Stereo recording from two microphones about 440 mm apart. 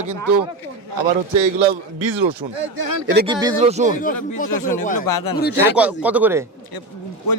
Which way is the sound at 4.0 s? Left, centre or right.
Centre.